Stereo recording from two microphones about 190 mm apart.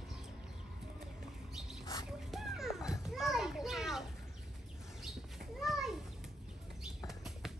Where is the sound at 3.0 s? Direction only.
Centre (ahead or behind).